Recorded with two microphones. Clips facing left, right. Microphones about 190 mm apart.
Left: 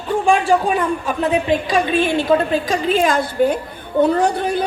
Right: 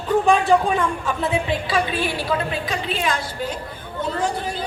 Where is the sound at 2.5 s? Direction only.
45° left (ahead or behind).